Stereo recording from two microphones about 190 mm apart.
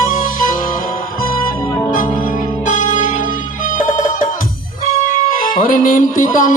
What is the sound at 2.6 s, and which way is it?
Music, 45° left (ahead or behind).